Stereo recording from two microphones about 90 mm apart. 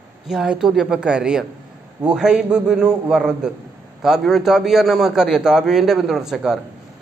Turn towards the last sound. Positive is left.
turn(degrees=-5)  # may be behind; listen again after turning